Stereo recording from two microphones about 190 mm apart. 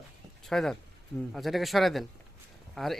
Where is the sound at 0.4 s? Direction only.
Centre (ahead or behind).